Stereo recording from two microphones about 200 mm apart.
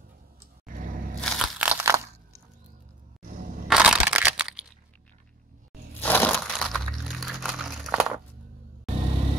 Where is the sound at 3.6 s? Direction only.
5° right (ahead or behind).